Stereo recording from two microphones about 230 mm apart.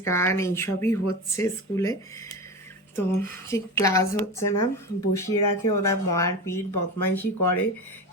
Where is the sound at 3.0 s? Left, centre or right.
Centre.